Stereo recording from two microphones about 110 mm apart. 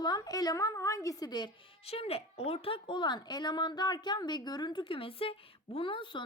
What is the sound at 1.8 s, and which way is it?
Speech, 65° left (ahead or behind).